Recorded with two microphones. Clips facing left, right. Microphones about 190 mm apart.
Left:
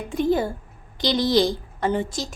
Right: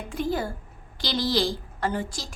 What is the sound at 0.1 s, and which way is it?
A woman's voice, 20° left (ahead or behind).